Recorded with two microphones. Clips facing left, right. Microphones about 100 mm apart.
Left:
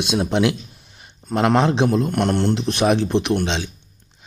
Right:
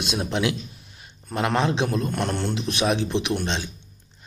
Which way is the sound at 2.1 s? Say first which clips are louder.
Left 7 dB; 65° left (ahead or behind).